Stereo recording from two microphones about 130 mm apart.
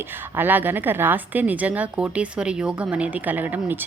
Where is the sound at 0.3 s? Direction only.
15° right (ahead or behind).